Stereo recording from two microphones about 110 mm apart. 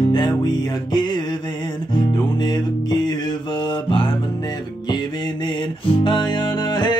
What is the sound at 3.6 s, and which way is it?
Music, 50° left (ahead or behind).